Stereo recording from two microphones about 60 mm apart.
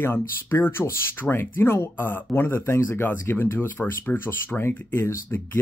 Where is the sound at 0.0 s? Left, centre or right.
Left.